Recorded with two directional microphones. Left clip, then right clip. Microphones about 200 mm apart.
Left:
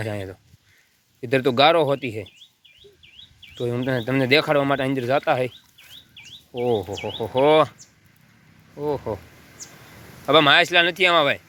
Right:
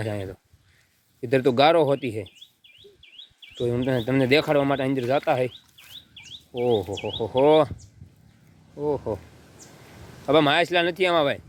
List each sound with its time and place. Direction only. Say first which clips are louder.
0.0 s speech: left 1 dB; 5° right (ahead or behind)
3.6 s speech: even; 10° right (ahead or behind)
9.0 s speech: left 1 dB; 5° left (ahead or behind)
9.6 s a sound: left 8 dB; 35° right (ahead or behind)
10.2 s speech: left 4 dB; 10° right (ahead or behind)